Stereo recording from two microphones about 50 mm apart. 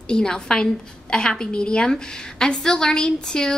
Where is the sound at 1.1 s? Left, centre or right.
Centre.